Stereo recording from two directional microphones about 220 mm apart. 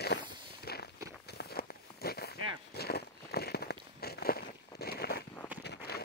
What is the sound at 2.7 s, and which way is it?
Walk, 45° left (ahead or behind).